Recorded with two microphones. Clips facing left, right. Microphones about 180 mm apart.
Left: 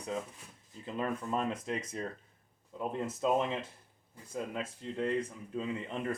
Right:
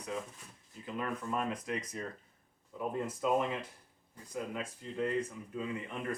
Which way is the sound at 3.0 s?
25° left (ahead or behind).